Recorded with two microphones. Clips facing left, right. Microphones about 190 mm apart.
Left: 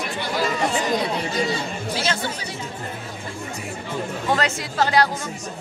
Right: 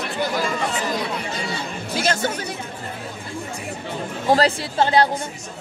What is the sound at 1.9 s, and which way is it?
Speech, 45° right (ahead or behind).